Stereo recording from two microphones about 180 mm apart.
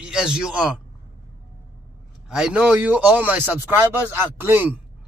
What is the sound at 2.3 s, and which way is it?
Speech, 5° right (ahead or behind).